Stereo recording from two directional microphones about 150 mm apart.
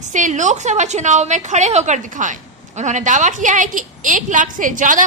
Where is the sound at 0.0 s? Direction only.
55° right (ahead or behind).